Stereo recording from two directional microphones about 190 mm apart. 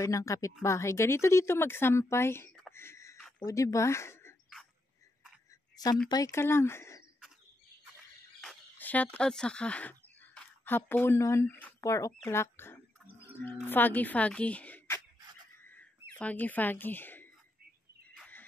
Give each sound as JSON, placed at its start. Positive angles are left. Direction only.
{"t": 0.0, "sound": "speech", "side_deg": 15}
{"t": 2.7, "sound": "a sound", "side_deg": 15}
{"t": 3.3, "sound": "speech", "side_deg": 15}
{"t": 6.0, "sound": "speech", "side_deg": 20}
{"t": 8.4, "sound": "speech", "side_deg": 5}
{"t": 15.6, "sound": "a sound", "side_deg": 10}